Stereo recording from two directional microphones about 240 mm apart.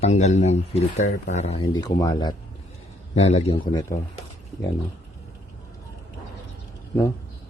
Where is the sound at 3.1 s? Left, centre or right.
Left.